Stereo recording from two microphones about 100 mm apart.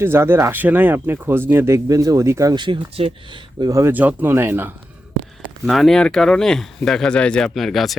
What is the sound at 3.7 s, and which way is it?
Speech, 30° right (ahead or behind).